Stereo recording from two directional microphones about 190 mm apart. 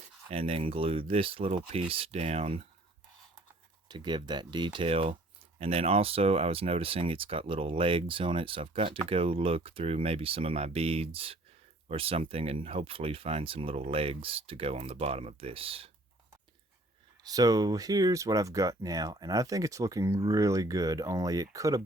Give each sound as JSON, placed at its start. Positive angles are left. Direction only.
{"t": 0.3, "sound": "speech", "side_deg": -30}
{"t": 3.8, "sound": "speech", "side_deg": -25}
{"t": 17.2, "sound": "speech", "side_deg": -20}